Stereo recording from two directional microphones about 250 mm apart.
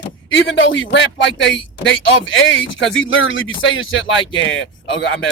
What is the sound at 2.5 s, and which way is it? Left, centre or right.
Speech, left.